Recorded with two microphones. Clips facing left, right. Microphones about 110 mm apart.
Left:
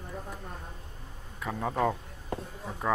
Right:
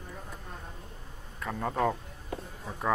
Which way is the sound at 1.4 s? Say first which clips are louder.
Even; 5° left (ahead or behind).